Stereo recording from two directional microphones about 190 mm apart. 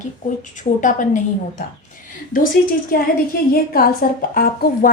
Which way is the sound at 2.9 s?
50° left (ahead or behind).